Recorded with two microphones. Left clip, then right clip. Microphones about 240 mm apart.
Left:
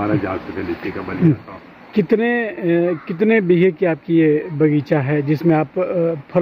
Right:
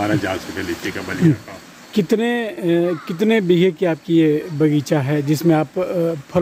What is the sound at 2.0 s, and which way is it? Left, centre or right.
Speech, centre.